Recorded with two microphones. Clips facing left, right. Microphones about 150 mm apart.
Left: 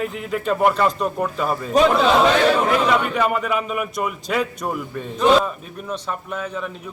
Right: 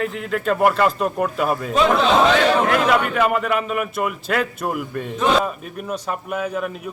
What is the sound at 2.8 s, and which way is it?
A man's voice, centre (ahead or behind).